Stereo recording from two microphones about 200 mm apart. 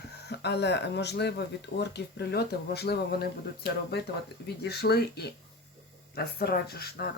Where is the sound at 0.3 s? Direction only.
55° left (ahead or behind).